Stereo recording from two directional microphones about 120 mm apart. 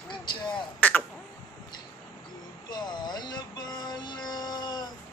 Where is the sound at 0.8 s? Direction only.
10° left (ahead or behind).